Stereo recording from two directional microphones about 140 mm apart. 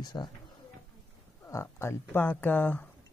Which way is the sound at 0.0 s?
30° left (ahead or behind).